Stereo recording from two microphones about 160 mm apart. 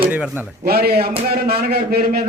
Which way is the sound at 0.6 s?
75° right (ahead or behind).